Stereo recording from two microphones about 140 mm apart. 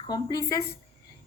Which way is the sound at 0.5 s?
90° left.